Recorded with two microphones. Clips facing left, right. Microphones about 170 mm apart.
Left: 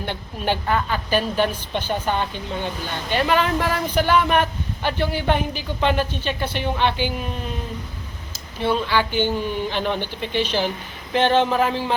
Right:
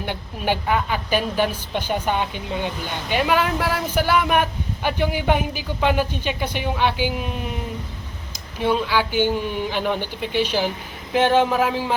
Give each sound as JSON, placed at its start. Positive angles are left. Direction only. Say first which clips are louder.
{"t": 0.0, "sound": "a woman's voice", "louder": "even", "side_deg": -10}
{"t": 8.5, "sound": "a woman's voice", "louder": "even", "side_deg": -10}